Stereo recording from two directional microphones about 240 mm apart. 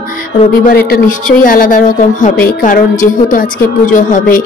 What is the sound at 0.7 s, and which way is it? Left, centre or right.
A woman's voice, left.